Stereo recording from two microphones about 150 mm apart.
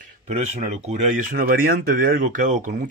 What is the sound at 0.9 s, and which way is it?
Speech, 60° right (ahead or behind).